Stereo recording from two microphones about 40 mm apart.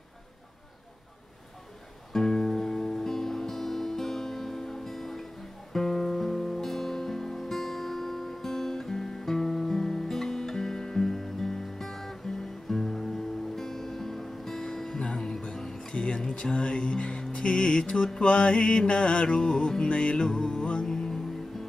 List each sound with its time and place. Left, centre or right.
2.1 s music: centre